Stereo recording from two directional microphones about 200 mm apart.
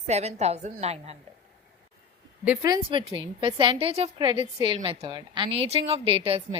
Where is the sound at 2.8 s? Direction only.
30° right (ahead or behind).